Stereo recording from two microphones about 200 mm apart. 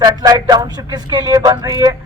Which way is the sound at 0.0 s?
20° right (ahead or behind).